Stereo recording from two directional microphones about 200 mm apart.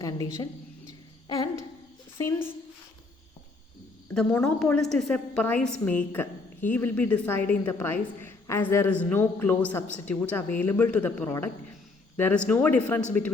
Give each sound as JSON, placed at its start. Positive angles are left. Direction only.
{"t": 0.0, "sound": "a sound", "side_deg": 20}
{"t": 2.1, "sound": "a woman's voice", "side_deg": 15}
{"t": 4.1, "sound": "a woman's voice", "side_deg": 5}